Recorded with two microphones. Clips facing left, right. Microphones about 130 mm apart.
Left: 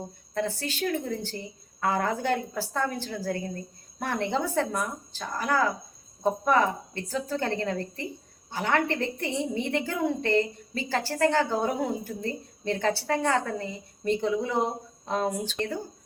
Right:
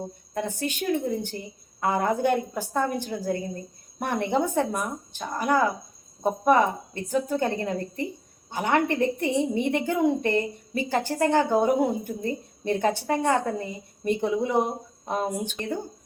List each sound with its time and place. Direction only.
0.3 s a woman's voice: 15° right (ahead or behind)